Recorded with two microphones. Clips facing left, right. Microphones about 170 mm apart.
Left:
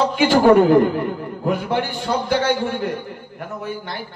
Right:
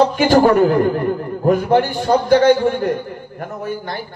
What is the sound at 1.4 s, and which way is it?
A man's voice, 45° right (ahead or behind).